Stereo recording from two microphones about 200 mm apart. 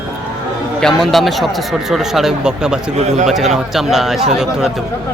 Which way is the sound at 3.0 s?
35° right (ahead or behind).